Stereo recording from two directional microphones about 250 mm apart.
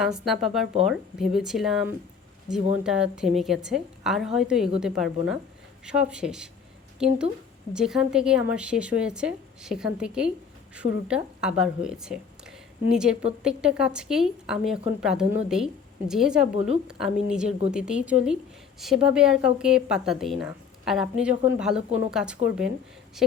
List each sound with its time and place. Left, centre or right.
0.0 s a woman's voice: centre
7.7 s a woman's voice: centre
16.6 s a woman's voice: right
16.8 s a woman's voice: centre